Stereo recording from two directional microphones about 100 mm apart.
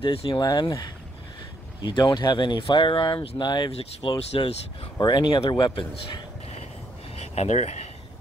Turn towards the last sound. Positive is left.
turn(degrees=90)